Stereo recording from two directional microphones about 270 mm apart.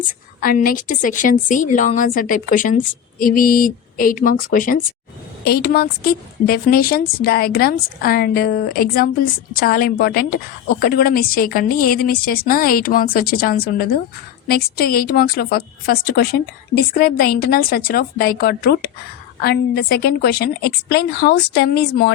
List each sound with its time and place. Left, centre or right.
0.3 s a woman's voice: left